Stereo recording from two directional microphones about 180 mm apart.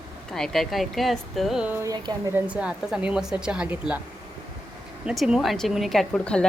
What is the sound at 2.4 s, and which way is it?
A woman's voice, 5° right (ahead or behind).